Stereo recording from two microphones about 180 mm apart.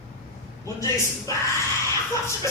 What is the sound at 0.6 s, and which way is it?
Speech, 20° left (ahead or behind).